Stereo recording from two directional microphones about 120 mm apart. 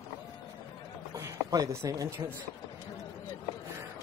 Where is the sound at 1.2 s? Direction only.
30° right (ahead or behind).